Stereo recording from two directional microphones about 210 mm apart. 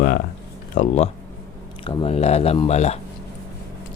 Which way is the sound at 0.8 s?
30° left (ahead or behind).